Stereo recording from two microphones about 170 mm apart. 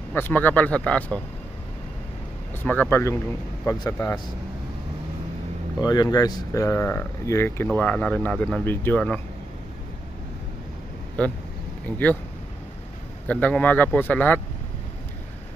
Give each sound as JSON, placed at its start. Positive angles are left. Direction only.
{"t": 0.1, "sound": "speech", "side_deg": 10}
{"t": 2.6, "sound": "speech", "side_deg": 10}
{"t": 5.8, "sound": "speech", "side_deg": 20}
{"t": 11.2, "sound": "speech", "side_deg": 10}
{"t": 13.3, "sound": "speech", "side_deg": 5}